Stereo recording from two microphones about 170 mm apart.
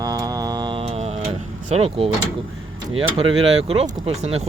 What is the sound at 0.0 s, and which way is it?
Mantra, 20° right (ahead or behind).